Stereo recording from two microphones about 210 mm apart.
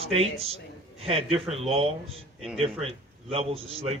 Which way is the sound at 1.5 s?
30° right (ahead or behind).